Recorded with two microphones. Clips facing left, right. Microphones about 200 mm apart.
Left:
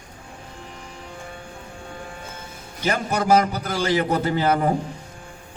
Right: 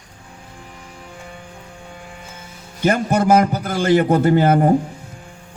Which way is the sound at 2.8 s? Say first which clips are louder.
Right 6 dB; 50° right (ahead or behind).